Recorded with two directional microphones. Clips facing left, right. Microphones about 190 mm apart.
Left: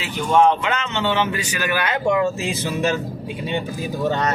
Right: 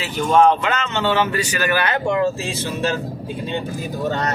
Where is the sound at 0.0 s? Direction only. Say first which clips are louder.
Right 1 dB; 15° left (ahead or behind).